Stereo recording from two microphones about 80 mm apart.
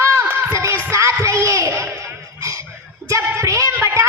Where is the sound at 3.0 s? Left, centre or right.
Right.